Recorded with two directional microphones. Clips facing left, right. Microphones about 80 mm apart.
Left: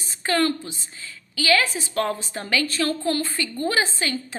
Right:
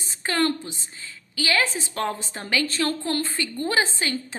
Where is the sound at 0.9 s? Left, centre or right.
Right.